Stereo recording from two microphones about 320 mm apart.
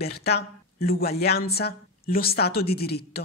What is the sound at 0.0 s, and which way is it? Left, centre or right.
Speech, left.